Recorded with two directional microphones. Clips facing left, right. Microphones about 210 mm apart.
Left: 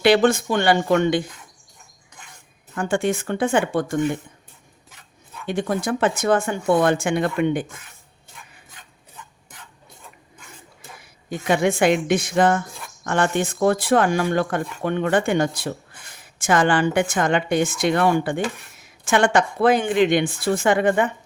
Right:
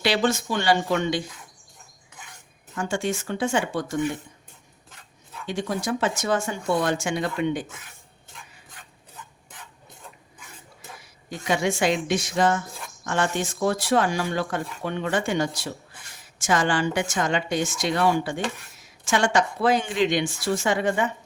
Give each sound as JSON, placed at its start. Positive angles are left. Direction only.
{"t": 0.0, "sound": "speech", "side_deg": 55}
{"t": 2.7, "sound": "speech", "side_deg": 55}
{"t": 5.5, "sound": "speech", "side_deg": 55}
{"t": 11.0, "sound": "speech", "side_deg": 55}